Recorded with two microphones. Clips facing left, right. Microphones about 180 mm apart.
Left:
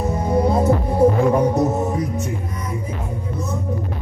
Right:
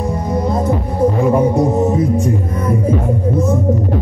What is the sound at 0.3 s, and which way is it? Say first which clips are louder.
Hum: left 1 dB; 10° left (ahead or behind).